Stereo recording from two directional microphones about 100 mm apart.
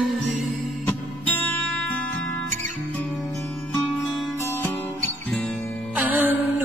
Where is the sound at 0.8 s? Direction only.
15° left (ahead or behind).